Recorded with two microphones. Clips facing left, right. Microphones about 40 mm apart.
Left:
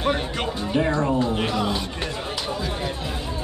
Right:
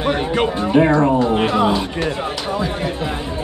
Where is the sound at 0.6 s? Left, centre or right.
Right.